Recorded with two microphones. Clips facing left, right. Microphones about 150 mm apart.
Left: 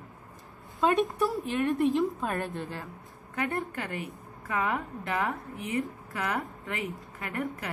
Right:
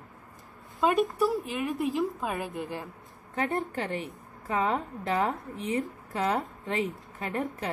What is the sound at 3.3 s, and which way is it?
A woman's voice, 25° right (ahead or behind).